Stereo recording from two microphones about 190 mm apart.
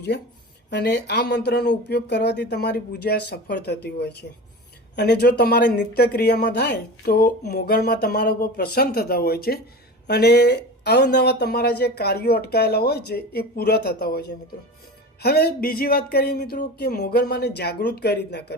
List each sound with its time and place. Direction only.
0.1 s speech: 60° left (ahead or behind)